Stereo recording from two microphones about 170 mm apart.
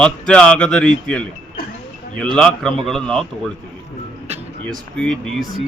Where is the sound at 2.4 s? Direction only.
5° left (ahead or behind).